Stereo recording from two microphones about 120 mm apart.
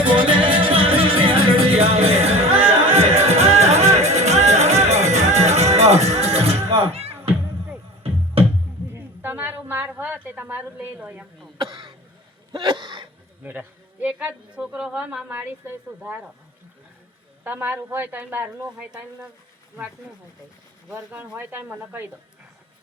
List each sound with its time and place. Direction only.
0.2 s music: 45° right (ahead or behind)
9.0 s a sound: 15° right (ahead or behind)
11.5 s cough: 45° right (ahead or behind)
12.5 s throat clearing: 40° right (ahead or behind)
13.4 s a woman's voice: 10° right (ahead or behind)
17.4 s a woman's voice: 15° right (ahead or behind)
21.1 s a woman's voice: 15° right (ahead or behind)